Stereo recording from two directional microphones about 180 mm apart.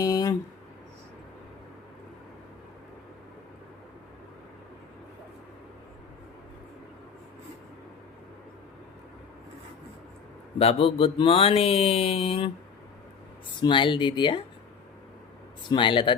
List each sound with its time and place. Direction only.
0.0 s a sound: 20° left (ahead or behind)
10.6 s speech: 35° left (ahead or behind)
13.6 s speech: 25° left (ahead or behind)
15.7 s speech: 25° left (ahead or behind)